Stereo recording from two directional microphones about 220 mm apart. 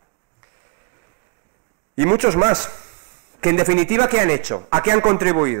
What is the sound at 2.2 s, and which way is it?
Speech, 20° right (ahead or behind).